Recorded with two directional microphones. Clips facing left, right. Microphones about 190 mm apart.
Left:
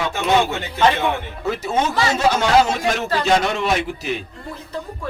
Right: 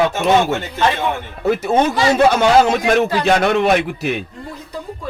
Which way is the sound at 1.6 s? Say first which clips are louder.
Right 3 dB; 60° right (ahead or behind).